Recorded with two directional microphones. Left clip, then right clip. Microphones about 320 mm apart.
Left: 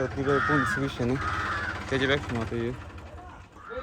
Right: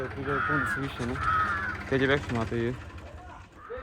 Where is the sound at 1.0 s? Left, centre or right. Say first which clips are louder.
Left 5 dB; left.